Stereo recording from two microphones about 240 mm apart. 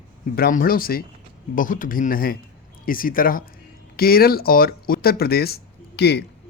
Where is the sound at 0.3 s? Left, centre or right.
Left.